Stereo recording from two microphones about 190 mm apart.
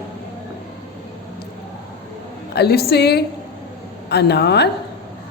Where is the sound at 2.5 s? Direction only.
60° left (ahead or behind).